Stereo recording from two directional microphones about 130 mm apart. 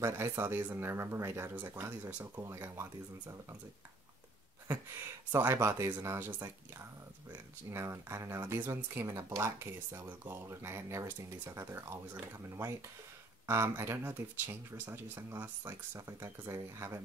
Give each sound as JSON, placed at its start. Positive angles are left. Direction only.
{"t": 0.0, "sound": "speech", "side_deg": -20}
{"t": 4.6, "sound": "speech", "side_deg": -15}
{"t": 7.7, "sound": "speech", "side_deg": -20}